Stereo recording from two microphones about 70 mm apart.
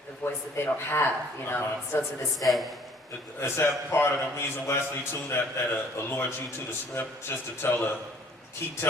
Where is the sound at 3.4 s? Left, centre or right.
Left.